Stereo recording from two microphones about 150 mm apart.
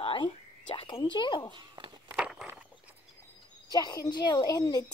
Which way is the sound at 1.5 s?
30° right (ahead or behind).